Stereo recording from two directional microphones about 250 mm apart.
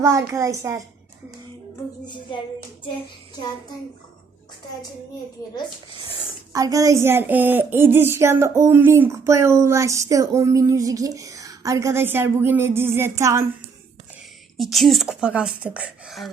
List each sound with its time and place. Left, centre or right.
0.0 s speech: centre
2.0 s a woman's voice: centre
6.5 s speech: centre
14.6 s a woman's voice: centre